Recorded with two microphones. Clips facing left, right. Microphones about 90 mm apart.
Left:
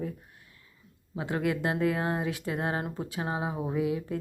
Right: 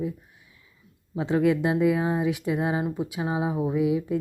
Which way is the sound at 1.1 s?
20° right (ahead or behind).